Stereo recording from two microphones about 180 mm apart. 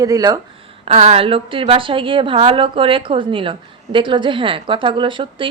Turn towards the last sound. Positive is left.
turn(degrees=-25)  # may be behind; listen again after turning